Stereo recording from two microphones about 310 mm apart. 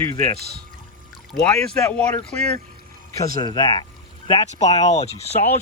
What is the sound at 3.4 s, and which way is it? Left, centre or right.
Speech, centre.